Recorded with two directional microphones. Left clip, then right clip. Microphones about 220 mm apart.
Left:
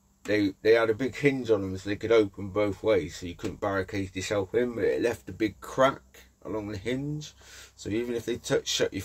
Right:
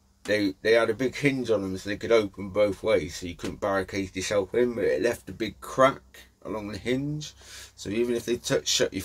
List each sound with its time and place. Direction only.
0.3 s speech: 10° left (ahead or behind)